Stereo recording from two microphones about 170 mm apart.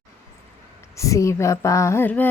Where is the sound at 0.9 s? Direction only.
20° left (ahead or behind).